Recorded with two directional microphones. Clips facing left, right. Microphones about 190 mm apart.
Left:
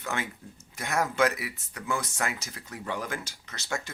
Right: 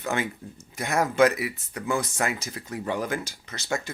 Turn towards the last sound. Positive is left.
turn(degrees=-15)  # may be behind; listen again after turning